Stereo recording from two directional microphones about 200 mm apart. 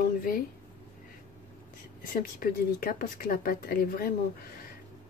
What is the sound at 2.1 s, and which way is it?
Speech, 45° left (ahead or behind).